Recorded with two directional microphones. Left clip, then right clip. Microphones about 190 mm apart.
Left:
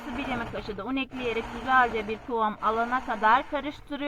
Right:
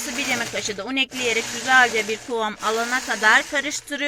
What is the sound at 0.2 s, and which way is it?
Speech, 15° right (ahead or behind).